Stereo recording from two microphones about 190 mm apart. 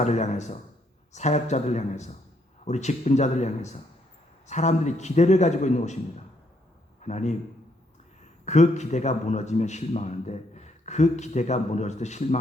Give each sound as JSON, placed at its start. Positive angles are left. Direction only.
{"t": 0.0, "sound": "a man's voice", "side_deg": 35}
{"t": 7.0, "sound": "a man's voice", "side_deg": 35}
{"t": 8.4, "sound": "a man's voice", "side_deg": 35}